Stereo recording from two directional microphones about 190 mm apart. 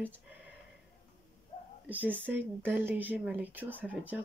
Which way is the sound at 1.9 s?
10° right (ahead or behind).